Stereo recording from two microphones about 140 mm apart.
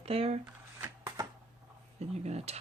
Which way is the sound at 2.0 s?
50° right (ahead or behind).